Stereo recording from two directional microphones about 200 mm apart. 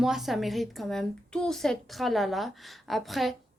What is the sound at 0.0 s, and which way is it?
Speech, centre (ahead or behind).